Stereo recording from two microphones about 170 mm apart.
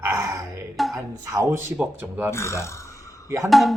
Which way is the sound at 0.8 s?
Centre (ahead or behind).